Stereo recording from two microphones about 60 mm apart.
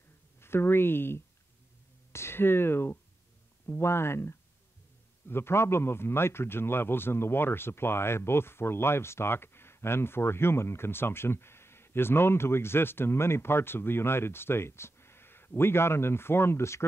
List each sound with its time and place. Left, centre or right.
0.4 s a man's voice: left